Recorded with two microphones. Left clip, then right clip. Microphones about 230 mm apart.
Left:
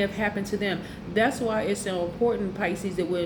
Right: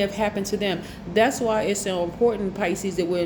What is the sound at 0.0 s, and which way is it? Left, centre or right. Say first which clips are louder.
A woman's voice: right 3 dB; right.